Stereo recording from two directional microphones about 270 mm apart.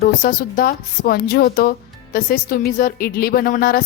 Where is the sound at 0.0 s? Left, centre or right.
Left.